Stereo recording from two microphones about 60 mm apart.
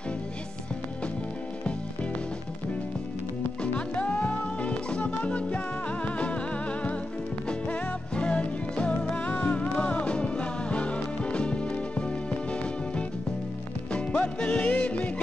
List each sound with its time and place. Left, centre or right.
3.6 s music: left
13.9 s music: centre